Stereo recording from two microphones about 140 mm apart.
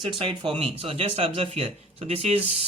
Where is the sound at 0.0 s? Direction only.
35° right (ahead or behind).